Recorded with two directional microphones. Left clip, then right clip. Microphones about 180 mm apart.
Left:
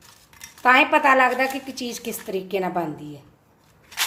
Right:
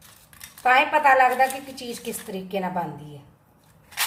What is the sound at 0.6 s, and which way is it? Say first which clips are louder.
A woman's voice: left 2 dB; 50° left (ahead or behind).